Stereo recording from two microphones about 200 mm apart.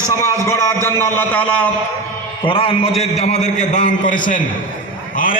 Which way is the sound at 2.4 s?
25° left (ahead or behind).